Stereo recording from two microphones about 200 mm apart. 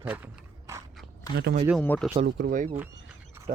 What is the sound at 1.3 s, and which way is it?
Speech, 55° right (ahead or behind).